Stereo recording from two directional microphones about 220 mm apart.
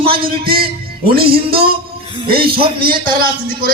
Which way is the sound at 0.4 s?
45° right (ahead or behind).